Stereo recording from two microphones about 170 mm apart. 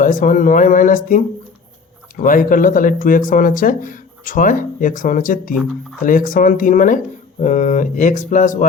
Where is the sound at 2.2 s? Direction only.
50° left (ahead or behind).